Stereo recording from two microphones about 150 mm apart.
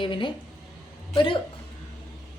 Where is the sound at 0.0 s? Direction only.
35° left (ahead or behind).